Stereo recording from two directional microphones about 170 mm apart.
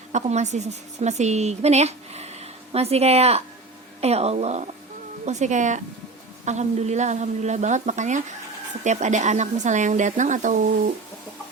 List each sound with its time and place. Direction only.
0.1 s a woman's voice: 40° right (ahead or behind)